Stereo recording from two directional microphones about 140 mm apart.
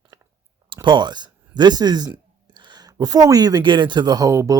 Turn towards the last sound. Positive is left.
turn(degrees=-20)  # may be behind; listen again after turning